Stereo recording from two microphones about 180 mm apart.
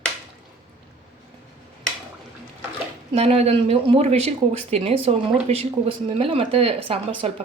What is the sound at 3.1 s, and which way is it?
Speech, 35° right (ahead or behind).